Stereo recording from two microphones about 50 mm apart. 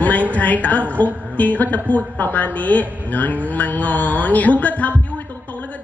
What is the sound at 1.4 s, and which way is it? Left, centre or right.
A woman's voice, left.